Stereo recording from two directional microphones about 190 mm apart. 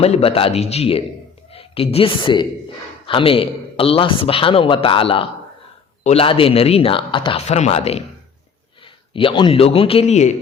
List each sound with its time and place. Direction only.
0.0 s a woman's voice: 30° left (ahead or behind)
9.1 s a man's voice: 25° left (ahead or behind)